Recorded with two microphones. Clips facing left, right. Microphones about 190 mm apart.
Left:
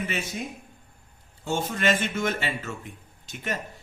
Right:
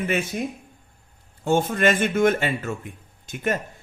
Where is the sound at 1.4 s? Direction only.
55° right (ahead or behind).